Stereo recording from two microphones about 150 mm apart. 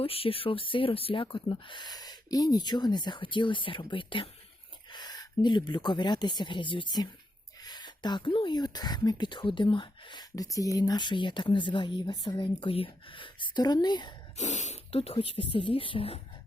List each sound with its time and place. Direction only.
0.0 s speech: 40° left (ahead or behind)
14.3 s speech: 50° left (ahead or behind)